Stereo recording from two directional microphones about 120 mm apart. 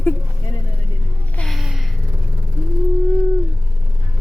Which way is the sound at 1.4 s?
Centre (ahead or behind).